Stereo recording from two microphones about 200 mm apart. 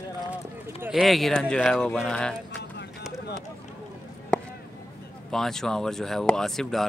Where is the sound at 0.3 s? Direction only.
5° right (ahead or behind).